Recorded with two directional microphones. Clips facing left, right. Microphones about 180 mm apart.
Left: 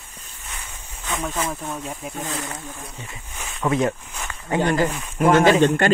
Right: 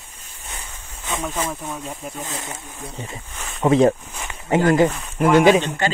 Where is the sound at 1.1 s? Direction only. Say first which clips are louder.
Right 1 dB; centre (ahead or behind).